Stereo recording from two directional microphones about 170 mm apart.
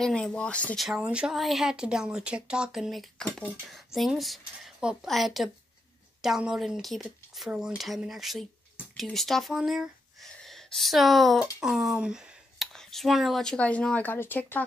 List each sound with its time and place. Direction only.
0.0 s speech: 5° left (ahead or behind)
0.8 s speech: 5° right (ahead or behind); by 14.6 s 10° left (ahead or behind)